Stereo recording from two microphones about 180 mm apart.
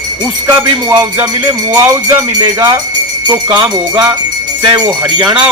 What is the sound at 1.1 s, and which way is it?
Music, 15° right (ahead or behind).